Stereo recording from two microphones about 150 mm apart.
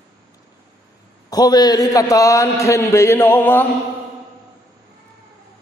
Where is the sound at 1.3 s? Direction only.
25° left (ahead or behind).